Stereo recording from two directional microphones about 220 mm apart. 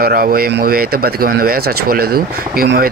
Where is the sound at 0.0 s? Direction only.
40° right (ahead or behind).